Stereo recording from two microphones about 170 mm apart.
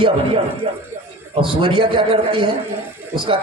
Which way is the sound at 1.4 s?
30° right (ahead or behind).